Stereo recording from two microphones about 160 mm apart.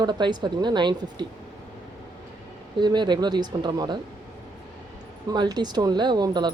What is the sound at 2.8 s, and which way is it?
Speech, 30° right (ahead or behind).